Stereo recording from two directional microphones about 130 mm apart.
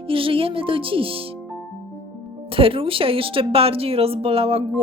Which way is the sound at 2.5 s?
45° right (ahead or behind).